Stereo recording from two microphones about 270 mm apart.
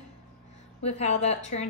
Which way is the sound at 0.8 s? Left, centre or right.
Left.